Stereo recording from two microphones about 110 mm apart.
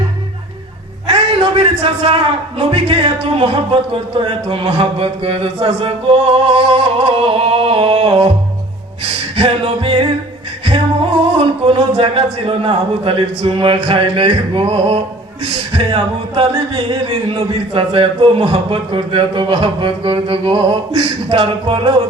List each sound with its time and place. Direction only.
1.0 s a sound: 55° right (ahead or behind)
3.4 s speech: 60° right (ahead or behind)
9.3 s speech: 60° right (ahead or behind)
11.3 s a man's voice: 60° right (ahead or behind)